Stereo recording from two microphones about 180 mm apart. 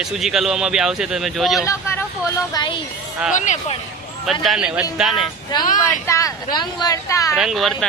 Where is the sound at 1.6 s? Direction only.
15° left (ahead or behind).